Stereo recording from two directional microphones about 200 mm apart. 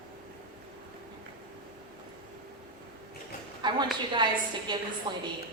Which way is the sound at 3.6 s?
20° right (ahead or behind).